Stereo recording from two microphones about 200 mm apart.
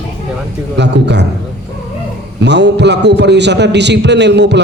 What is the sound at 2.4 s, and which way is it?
A man's voice, 60° right (ahead or behind).